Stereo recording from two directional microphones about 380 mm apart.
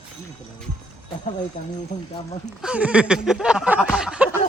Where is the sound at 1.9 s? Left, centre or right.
Centre.